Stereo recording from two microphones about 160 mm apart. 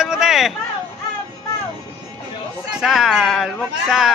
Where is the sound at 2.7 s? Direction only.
Centre (ahead or behind).